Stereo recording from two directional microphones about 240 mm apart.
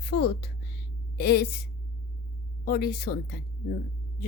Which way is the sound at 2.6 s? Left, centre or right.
Left.